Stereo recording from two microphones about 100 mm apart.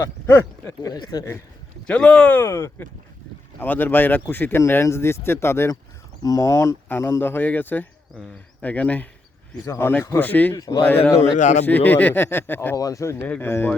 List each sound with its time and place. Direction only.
0.0 s speech: 25° left (ahead or behind)
0.8 s speech: 40° left (ahead or behind)
1.9 s speech: 10° left (ahead or behind)
2.4 s speech: 25° left (ahead or behind)
12.7 s speech: 35° left (ahead or behind)
13.2 s speech: 20° left (ahead or behind)